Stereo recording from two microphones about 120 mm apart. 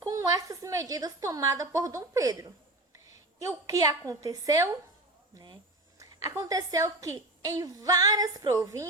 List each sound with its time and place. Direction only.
0.0 s a woman's voice: 25° right (ahead or behind)
3.7 s a woman's voice: 30° right (ahead or behind)
6.2 s a woman's voice: 30° right (ahead or behind)